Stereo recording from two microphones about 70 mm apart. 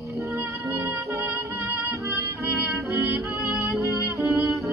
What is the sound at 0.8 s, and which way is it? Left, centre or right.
Music, right.